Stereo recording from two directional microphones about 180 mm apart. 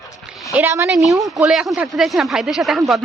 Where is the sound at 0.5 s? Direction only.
15° right (ahead or behind).